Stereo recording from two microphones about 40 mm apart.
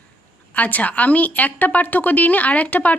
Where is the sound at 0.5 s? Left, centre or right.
Left.